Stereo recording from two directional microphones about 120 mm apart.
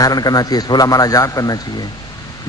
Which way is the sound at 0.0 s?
30° left (ahead or behind).